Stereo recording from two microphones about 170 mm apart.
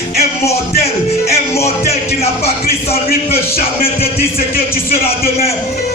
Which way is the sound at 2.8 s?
35° left (ahead or behind).